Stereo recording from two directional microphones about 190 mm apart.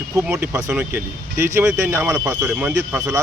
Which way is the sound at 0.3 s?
10° right (ahead or behind).